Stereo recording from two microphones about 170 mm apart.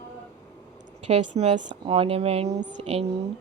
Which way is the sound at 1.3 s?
35° right (ahead or behind).